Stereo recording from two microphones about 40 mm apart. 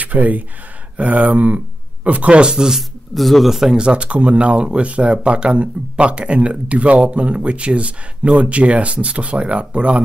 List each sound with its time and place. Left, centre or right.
0.0 s speech: right
2.5 s speech: centre
3.2 s speech: centre
3.4 s speech: centre
3.7 s speech: right